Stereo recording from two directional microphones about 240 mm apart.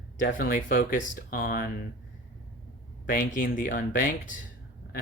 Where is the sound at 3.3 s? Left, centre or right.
Left.